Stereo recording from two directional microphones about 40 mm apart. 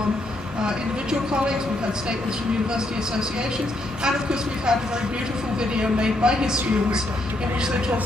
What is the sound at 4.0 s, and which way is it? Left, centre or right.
Speech, centre.